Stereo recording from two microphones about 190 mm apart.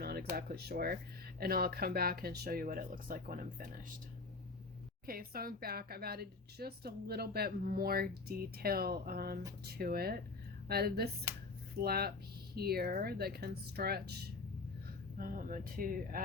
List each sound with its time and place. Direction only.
0.0 s a sound: 55° right (ahead or behind)
0.3 s speech: 55° right (ahead or behind)
5.0 s speech: 50° right (ahead or behind)
15.2 s speech: 45° right (ahead or behind)